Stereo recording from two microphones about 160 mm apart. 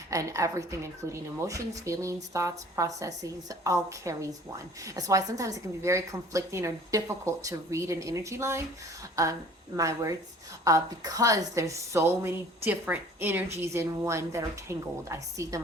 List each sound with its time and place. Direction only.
0.1 s a woman's voice: 20° right (ahead or behind)